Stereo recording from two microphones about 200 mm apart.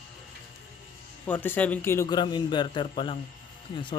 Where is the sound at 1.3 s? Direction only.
10° left (ahead or behind).